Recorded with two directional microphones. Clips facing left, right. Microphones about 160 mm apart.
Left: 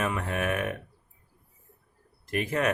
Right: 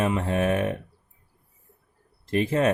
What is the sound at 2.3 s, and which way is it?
Speech, 30° right (ahead or behind).